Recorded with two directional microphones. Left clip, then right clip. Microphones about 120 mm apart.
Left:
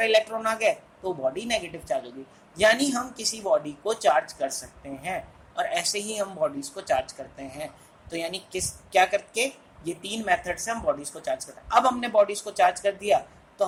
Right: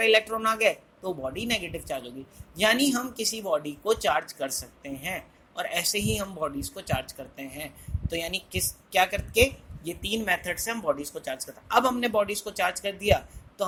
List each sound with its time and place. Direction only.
0.0 s speech: 45° right (ahead or behind)